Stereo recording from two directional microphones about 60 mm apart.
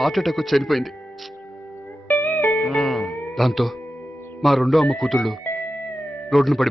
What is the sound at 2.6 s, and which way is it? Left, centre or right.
Music, centre.